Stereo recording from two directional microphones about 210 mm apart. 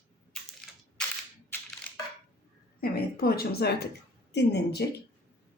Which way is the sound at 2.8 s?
45° left (ahead or behind).